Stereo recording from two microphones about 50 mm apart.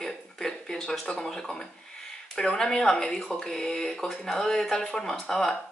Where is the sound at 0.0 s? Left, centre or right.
Centre.